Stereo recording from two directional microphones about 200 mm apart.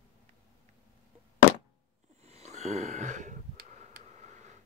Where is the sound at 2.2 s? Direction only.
35° right (ahead or behind).